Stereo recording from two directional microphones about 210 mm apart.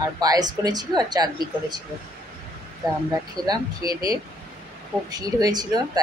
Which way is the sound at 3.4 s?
20° right (ahead or behind).